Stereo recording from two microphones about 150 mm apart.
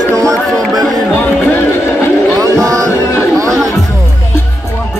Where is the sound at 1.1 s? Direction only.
15° left (ahead or behind).